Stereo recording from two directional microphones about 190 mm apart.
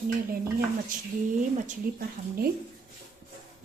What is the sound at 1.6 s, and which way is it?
Speech, 50° right (ahead or behind).